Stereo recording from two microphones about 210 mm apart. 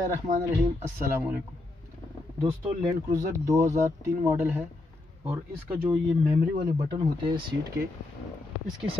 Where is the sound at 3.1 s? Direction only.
15° right (ahead or behind).